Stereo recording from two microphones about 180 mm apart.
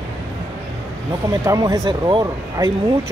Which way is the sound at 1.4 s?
20° right (ahead or behind).